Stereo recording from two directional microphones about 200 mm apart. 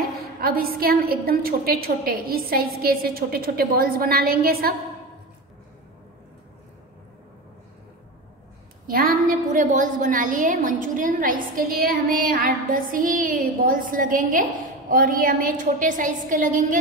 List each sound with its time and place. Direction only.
0.4 s a woman's voice: 50° right (ahead or behind)
8.8 s a woman's voice: 45° right (ahead or behind)